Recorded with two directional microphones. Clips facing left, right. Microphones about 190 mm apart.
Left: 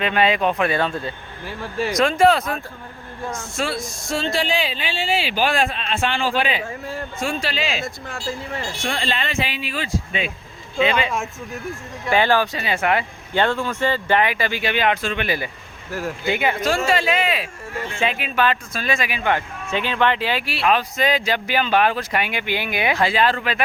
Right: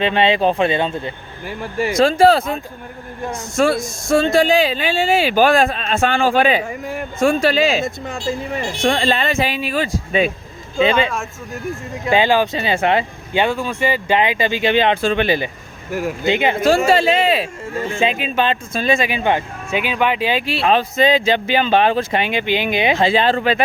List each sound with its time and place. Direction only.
0.0 s speech: 30° right (ahead or behind)
2.0 s speech: 35° right (ahead or behind)
3.3 s speech: 45° right (ahead or behind)
6.7 s a man's voice: 15° right (ahead or behind)
7.2 s speech: 50° right (ahead or behind)
7.9 s speech: 20° right (ahead or behind)
8.8 s speech: 40° right (ahead or behind)
12.0 s speech: 15° right (ahead or behind)
13.3 s speech: 10° right (ahead or behind); by 15.4 s 30° right (ahead or behind)
15.9 s speech: 15° right (ahead or behind)